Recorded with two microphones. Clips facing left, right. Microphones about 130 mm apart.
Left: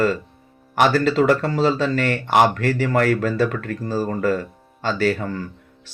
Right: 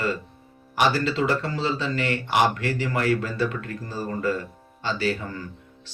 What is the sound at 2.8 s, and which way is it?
Speech, 65° left (ahead or behind).